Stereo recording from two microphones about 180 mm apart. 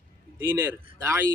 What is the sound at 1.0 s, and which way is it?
Speech, 15° right (ahead or behind).